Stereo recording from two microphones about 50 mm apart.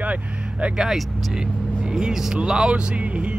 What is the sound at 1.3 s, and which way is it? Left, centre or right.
Speech, centre.